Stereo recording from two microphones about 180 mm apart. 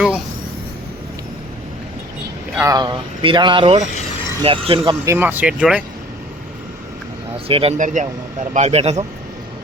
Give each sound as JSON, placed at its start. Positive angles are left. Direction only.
{"t": 2.6, "sound": "speech", "side_deg": -20}
{"t": 5.1, "sound": "speech", "side_deg": -10}
{"t": 7.3, "sound": "speech", "side_deg": -30}